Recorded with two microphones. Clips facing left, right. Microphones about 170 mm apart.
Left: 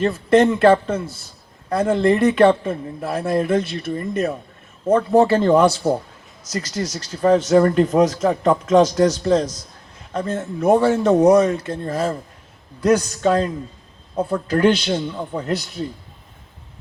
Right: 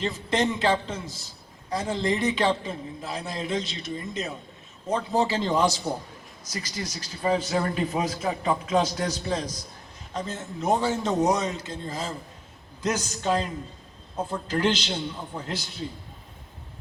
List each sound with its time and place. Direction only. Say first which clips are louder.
0.0 s a man's voice: left 11 dB; 55° left (ahead or behind)
6.5 s a man's voice: left 9 dB; 75° left (ahead or behind)
10.1 s a man's voice: left 9 dB; 60° left (ahead or behind)